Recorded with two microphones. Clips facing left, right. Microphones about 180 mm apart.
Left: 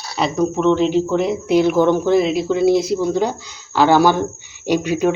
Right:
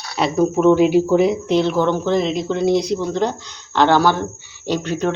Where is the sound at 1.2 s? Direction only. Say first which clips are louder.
Left 1 dB; 5° left (ahead or behind).